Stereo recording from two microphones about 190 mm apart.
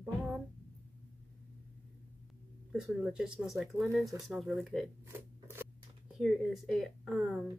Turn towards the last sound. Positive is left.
turn(degrees=0)  # may be behind; listen again after turning